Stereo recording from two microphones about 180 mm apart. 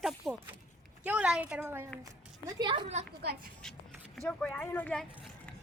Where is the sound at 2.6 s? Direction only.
25° right (ahead or behind).